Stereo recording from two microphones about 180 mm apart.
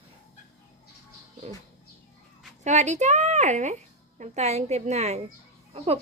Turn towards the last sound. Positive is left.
turn(degrees=-35)  # may be behind; listen again after turning